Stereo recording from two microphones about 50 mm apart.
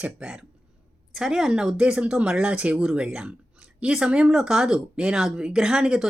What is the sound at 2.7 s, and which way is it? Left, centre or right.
Speech, centre.